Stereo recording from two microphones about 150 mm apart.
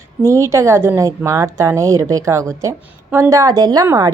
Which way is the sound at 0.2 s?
20° right (ahead or behind).